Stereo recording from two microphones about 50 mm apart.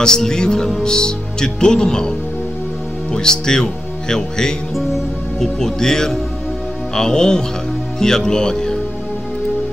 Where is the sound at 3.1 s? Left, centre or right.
Centre.